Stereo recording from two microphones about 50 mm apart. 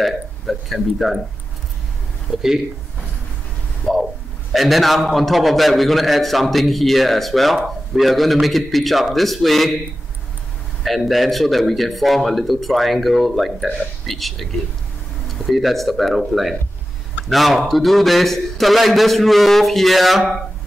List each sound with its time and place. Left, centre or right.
0.0 s speech: centre
4.5 s a man's voice: centre
10.8 s a man's voice: centre